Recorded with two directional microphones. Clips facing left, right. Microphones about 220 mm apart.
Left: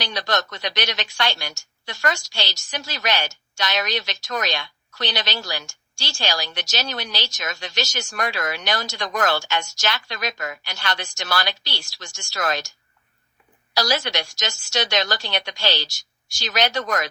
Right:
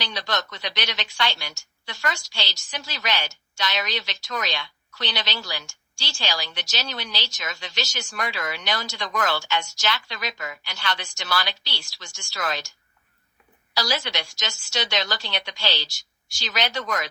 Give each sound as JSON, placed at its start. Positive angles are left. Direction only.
{"t": 0.1, "sound": "a woman's voice", "side_deg": 45}
{"t": 13.7, "sound": "speech", "side_deg": 45}